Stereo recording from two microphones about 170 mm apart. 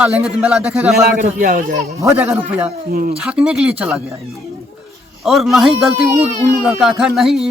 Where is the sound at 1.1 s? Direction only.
50° right (ahead or behind).